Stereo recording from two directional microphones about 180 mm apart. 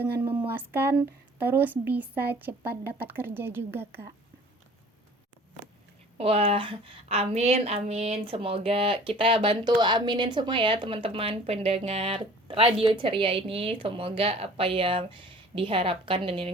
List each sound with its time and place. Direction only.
0.2 s a woman's voice: 10° right (ahead or behind)
6.1 s a woman's voice: 35° right (ahead or behind)